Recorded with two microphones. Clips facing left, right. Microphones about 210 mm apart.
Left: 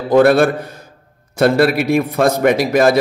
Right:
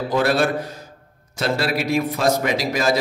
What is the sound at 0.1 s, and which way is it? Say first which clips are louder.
A man's voice: left 9 dB; 55° left (ahead or behind).